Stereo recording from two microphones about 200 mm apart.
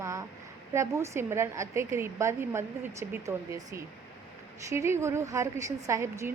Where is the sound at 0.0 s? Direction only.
15° right (ahead or behind).